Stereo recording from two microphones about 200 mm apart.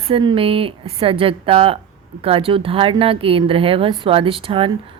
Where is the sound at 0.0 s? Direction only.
25° right (ahead or behind).